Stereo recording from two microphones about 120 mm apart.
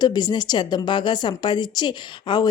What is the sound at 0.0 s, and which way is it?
A woman's voice, 35° left (ahead or behind).